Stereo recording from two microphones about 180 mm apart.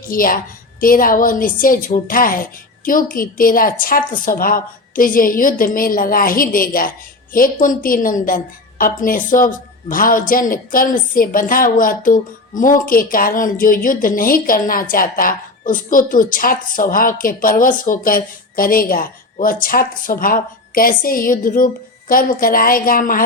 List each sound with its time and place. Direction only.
0.0 s a woman's voice: 50° left (ahead or behind)